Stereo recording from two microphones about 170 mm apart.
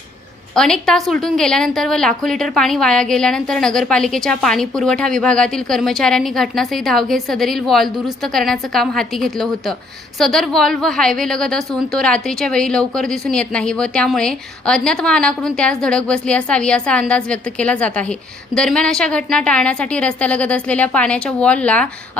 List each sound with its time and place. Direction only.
0.5 s a woman's voice: 5° left (ahead or behind)